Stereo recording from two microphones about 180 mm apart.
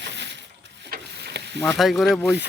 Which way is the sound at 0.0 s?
75° right (ahead or behind).